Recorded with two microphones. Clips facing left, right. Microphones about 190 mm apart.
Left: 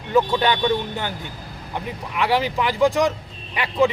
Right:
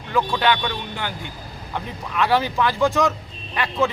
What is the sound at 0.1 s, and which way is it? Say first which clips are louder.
Speech: left 2 dB; 20° left (ahead or behind).